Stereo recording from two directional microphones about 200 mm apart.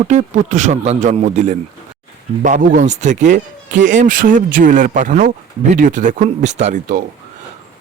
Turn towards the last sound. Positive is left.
turn(degrees=-40)  # may be behind; listen again after turning